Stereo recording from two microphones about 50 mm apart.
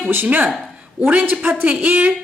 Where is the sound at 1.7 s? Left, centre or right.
Right.